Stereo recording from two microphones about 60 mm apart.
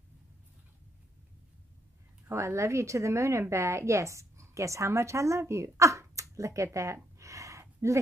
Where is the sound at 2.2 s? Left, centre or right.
Right.